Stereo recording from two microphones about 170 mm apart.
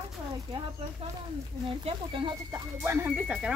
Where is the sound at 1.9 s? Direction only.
30° right (ahead or behind).